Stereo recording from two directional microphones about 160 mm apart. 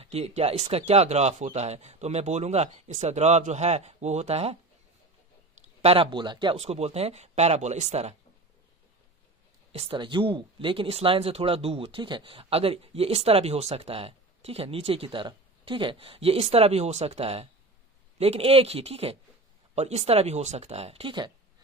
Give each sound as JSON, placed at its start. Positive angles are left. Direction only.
{"t": 0.0, "sound": "speech", "side_deg": -40}
{"t": 5.8, "sound": "speech", "side_deg": -35}
{"t": 9.7, "sound": "speech", "side_deg": -30}